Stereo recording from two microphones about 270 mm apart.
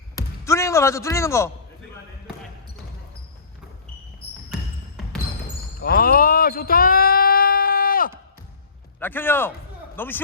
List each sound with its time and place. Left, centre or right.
0.2 s basketball bounce: centre
5.8 s a sound: left
9.0 s a man's voice: centre